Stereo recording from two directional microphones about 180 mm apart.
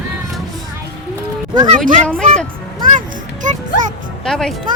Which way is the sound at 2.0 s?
5° left (ahead or behind).